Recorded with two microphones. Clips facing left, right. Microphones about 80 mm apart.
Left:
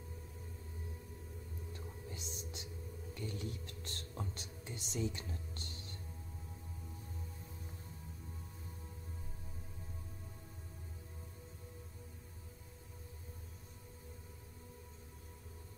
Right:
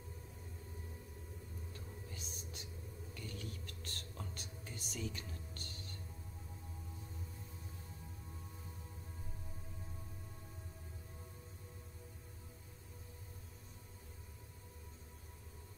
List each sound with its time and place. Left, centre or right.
1.7 s whispering: left